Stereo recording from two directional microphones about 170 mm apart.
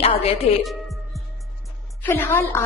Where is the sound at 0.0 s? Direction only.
35° left (ahead or behind).